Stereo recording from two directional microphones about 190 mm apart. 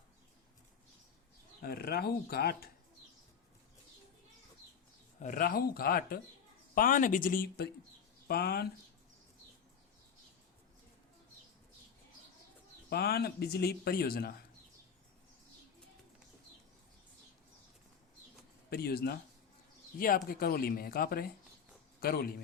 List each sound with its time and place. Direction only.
1.6 s speech: 55° left (ahead or behind)
5.2 s speech: 45° left (ahead or behind)
12.9 s speech: 55° left (ahead or behind)
18.7 s speech: 55° left (ahead or behind)